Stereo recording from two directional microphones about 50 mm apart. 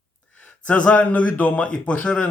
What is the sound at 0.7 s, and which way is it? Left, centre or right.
Speech, left.